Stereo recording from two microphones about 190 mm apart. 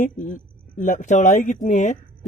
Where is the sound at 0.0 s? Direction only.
45° left (ahead or behind).